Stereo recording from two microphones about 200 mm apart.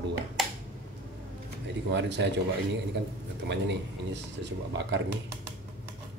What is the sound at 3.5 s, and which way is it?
Speech, 60° right (ahead or behind).